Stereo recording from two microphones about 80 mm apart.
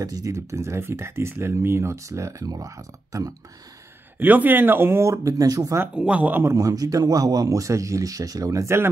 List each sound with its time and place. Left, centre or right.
0.0 s speech: right
4.2 s speech: right
5.9 s speech: centre
6.4 s speech: right